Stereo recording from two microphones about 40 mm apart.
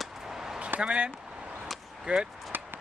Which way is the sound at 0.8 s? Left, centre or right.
Right.